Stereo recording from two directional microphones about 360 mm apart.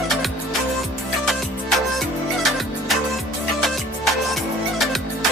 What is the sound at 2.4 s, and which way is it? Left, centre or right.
Music, centre.